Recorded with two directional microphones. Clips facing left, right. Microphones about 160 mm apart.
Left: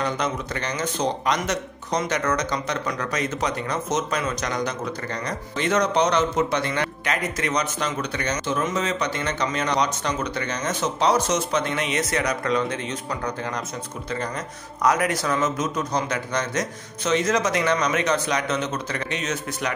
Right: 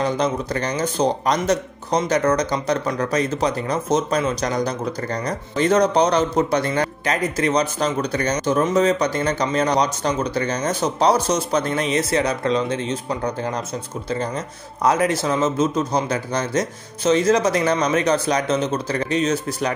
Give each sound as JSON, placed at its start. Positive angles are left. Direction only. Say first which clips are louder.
{"t": 0.0, "sound": "speech", "louder": "right 5 dB", "side_deg": -35}
{"t": 14.8, "sound": "speech", "louder": "right 3 dB", "side_deg": -30}